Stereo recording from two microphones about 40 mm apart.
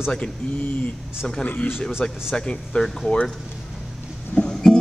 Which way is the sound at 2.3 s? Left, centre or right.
Left.